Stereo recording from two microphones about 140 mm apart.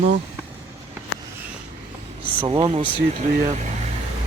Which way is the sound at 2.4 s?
40° right (ahead or behind).